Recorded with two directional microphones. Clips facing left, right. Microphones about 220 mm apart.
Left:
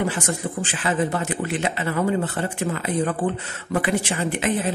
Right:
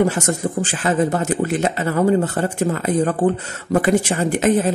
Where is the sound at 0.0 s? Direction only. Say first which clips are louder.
Right 6 dB; 45° right (ahead or behind).